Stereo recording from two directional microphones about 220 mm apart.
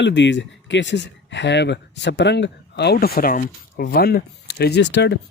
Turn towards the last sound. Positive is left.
turn(degrees=50)  # may be behind; listen again after turning